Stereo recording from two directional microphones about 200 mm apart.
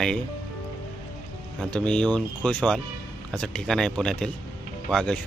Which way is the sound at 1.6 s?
5° left (ahead or behind).